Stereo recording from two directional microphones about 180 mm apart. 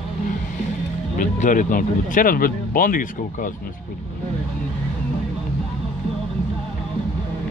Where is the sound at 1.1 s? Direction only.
45° left (ahead or behind).